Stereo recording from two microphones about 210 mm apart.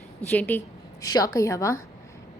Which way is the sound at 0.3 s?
10° left (ahead or behind).